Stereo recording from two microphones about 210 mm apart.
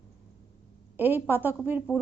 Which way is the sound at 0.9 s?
10° right (ahead or behind).